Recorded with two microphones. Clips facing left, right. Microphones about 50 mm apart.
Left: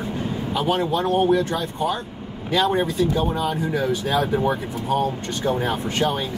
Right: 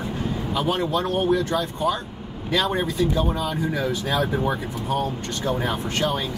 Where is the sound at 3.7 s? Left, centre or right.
Centre.